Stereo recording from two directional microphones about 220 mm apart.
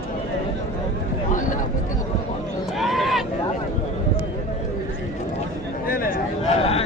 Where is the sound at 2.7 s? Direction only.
Centre (ahead or behind).